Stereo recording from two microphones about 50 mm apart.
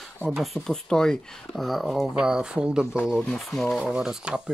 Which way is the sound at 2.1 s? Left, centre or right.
Centre.